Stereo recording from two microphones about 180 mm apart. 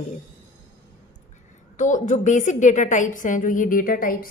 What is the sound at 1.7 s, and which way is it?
A woman's voice, 45° left (ahead or behind).